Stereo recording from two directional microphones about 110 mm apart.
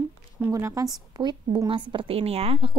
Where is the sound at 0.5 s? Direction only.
30° right (ahead or behind).